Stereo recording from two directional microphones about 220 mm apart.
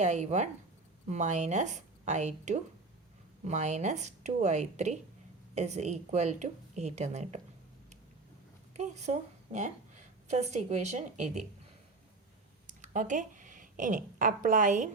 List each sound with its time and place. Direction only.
0.0 s a woman's voice: 30° right (ahead or behind)
8.7 s a woman's voice: 30° right (ahead or behind)
12.6 s speech: 35° right (ahead or behind)